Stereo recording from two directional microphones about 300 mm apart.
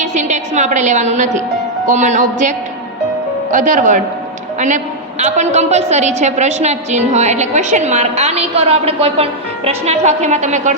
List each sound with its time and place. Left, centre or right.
0.0 s a woman's voice: right
5.2 s a woman's voice: right